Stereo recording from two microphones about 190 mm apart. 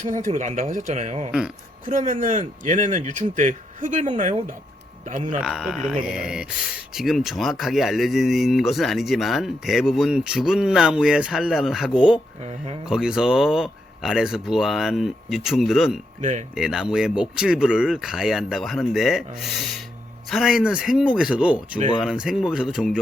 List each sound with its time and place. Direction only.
0.1 s speech: 40° right (ahead or behind)
5.4 s speech: centre (ahead or behind)